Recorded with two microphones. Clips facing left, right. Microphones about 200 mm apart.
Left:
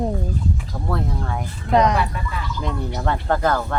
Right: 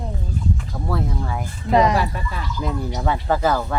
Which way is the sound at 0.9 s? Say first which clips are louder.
Even; centre (ahead or behind).